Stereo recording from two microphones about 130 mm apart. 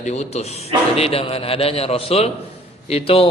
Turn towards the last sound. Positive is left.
turn(degrees=45)  # may be behind; listen again after turning